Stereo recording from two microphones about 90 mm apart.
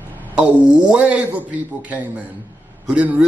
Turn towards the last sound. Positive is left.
turn(degrees=-15)  # may be behind; listen again after turning